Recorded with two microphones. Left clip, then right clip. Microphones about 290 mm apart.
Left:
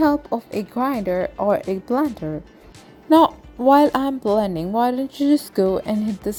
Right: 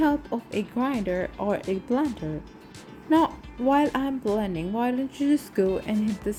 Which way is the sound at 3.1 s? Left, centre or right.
Left.